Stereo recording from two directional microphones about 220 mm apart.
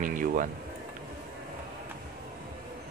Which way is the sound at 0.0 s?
35° right (ahead or behind).